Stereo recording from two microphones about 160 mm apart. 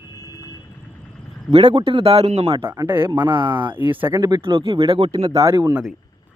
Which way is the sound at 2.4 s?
30° right (ahead or behind).